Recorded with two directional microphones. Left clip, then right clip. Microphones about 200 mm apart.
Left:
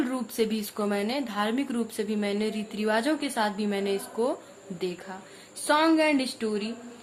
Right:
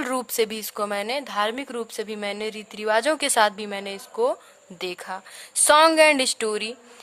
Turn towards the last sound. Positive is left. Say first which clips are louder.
# right 6 dB
turn(degrees=-45)  # may be behind; listen again after turning